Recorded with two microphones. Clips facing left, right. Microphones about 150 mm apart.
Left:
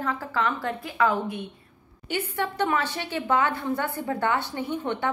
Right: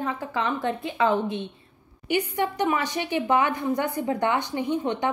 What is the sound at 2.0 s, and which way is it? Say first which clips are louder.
A woman's voice: right 4 dB; 15° right (ahead or behind).